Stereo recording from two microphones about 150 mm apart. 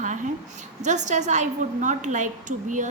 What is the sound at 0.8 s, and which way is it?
A woman's voice, 55° right (ahead or behind).